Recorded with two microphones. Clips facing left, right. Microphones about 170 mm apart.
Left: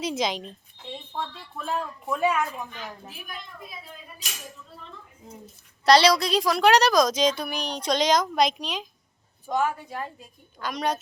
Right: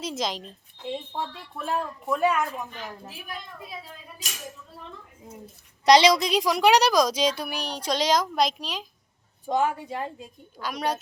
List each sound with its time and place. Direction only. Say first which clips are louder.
0.0 s a woman's voice: left 3 dB; centre (ahead or behind)
1.1 s a woman's voice: right 1 dB; 10° right (ahead or behind)
5.8 s a woman's voice: right 1 dB; 20° right (ahead or behind); by 8.9 s centre (ahead or behind)
9.5 s a woman's voice: right 1 dB; 25° right (ahead or behind)
10.6 s a woman's voice: left 1 dB; 5° right (ahead or behind)